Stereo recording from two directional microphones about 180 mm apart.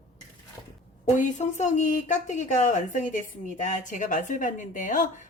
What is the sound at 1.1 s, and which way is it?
A woman's voice, 45° left (ahead or behind).